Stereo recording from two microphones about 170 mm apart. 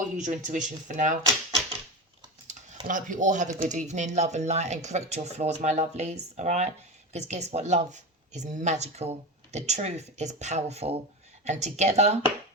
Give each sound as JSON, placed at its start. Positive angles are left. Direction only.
{"t": 0.2, "sound": "speech", "side_deg": -45}
{"t": 2.8, "sound": "speech", "side_deg": -50}